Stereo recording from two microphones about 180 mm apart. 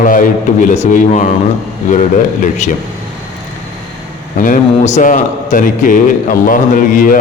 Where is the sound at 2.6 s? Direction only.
40° left (ahead or behind).